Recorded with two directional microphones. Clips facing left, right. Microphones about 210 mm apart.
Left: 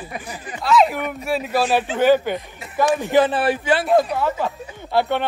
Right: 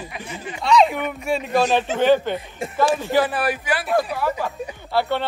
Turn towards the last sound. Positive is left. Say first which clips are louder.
# left 2 dB
turn(degrees=20)  # may be behind; listen again after turning